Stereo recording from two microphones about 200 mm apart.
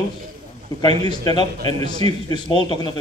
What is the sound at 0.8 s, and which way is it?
A man's voice, 20° left (ahead or behind).